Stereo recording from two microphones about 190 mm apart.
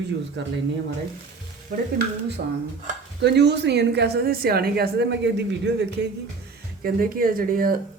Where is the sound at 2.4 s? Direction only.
55° right (ahead or behind).